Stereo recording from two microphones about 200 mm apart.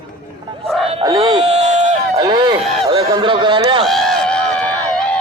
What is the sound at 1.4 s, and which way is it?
Run, 30° right (ahead or behind).